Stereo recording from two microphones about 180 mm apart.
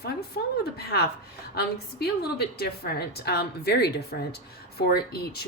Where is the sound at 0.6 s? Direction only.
60° left (ahead or behind).